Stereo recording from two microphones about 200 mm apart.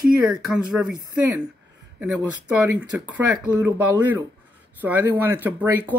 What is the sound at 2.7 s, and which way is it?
Speech, 5° right (ahead or behind).